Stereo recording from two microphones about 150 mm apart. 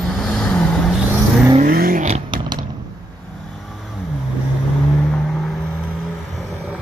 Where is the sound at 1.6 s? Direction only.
75° right (ahead or behind).